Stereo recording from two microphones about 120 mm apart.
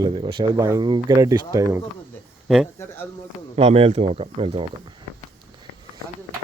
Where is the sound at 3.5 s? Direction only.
65° right (ahead or behind).